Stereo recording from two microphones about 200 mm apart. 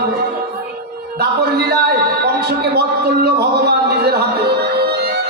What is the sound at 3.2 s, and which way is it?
Music, 55° right (ahead or behind).